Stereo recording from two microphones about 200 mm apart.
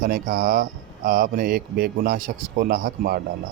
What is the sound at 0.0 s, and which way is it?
Speech, 40° right (ahead or behind).